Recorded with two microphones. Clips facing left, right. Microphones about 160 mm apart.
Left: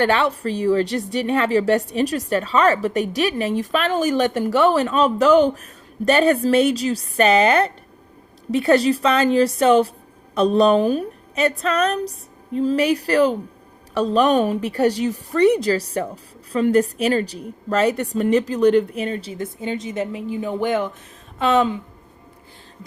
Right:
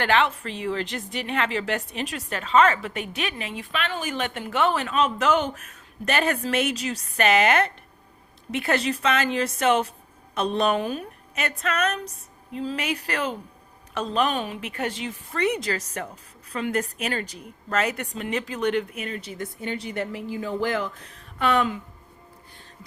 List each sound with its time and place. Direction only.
0.3 s a woman's voice: 40° left (ahead or behind)